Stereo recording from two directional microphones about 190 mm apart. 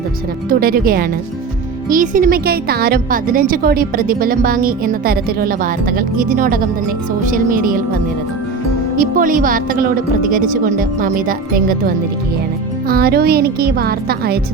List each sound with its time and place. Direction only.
0.5 s a woman's voice: 50° right (ahead or behind)
9.0 s a woman's voice: 45° right (ahead or behind)